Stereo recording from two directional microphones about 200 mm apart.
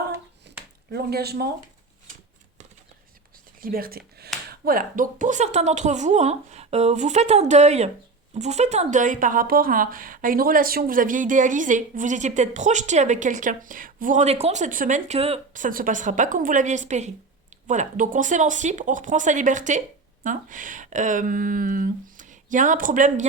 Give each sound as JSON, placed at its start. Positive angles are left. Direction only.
{"t": 0.5, "sound": "a sound", "side_deg": -60}
{"t": 0.9, "sound": "speech", "side_deg": -55}
{"t": 3.6, "sound": "speech", "side_deg": -45}